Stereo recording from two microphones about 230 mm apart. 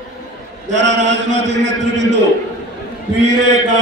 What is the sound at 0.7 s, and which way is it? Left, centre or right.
A man's voice, right.